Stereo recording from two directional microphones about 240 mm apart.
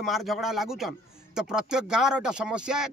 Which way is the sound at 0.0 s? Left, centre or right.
Centre.